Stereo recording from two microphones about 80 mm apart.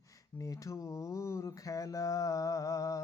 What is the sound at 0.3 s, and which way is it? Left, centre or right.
Mantra, left.